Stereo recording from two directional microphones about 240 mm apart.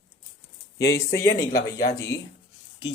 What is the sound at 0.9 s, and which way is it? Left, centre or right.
Speech, centre.